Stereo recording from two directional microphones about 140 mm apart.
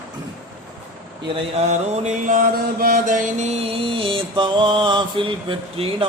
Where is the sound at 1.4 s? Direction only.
50° right (ahead or behind).